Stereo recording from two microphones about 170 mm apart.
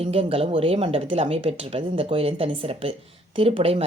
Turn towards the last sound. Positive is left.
turn(degrees=-35)  # may be behind; listen again after turning